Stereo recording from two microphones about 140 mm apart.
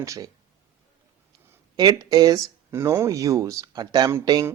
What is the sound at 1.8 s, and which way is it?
Speech, 30° right (ahead or behind).